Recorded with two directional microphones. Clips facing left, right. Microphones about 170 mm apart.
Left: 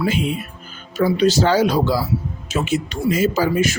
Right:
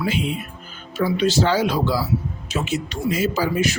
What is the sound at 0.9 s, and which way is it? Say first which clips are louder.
A man's voice: left 3 dB; 40° left (ahead or behind).